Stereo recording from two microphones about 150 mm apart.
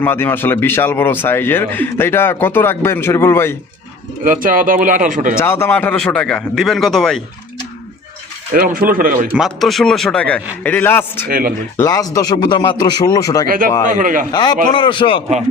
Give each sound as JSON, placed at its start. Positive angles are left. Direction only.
{"t": 0.0, "sound": "speech", "side_deg": 15}
{"t": 4.2, "sound": "speech", "side_deg": -65}
{"t": 5.4, "sound": "a man's voice", "side_deg": 15}
{"t": 8.5, "sound": "speech", "side_deg": -75}
{"t": 9.3, "sound": "a man's voice", "side_deg": 0}
{"t": 11.3, "sound": "speech", "side_deg": -75}
{"t": 11.8, "sound": "a man's voice", "side_deg": 25}
{"t": 13.8, "sound": "speech", "side_deg": -65}
{"t": 14.3, "sound": "a man's voice", "side_deg": 30}